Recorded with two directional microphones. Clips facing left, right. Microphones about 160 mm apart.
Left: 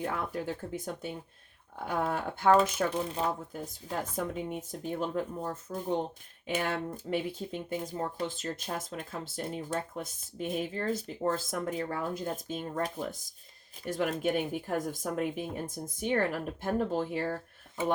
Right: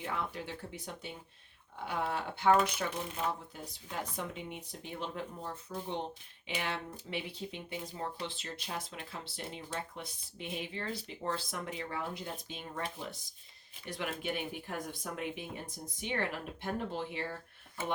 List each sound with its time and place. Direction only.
0.0 s speech: 50° left (ahead or behind)